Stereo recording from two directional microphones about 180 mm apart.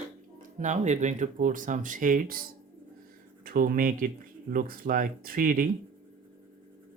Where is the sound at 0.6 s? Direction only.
40° right (ahead or behind).